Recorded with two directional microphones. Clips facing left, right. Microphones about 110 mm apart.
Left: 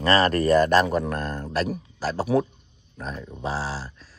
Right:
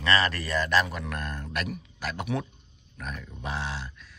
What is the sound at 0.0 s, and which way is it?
Speech, 40° left (ahead or behind).